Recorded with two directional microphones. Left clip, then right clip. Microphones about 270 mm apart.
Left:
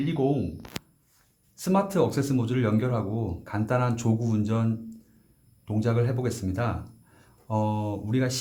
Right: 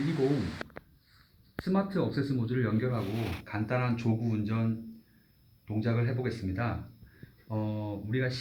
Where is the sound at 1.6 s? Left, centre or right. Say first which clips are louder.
Left 7 dB; left.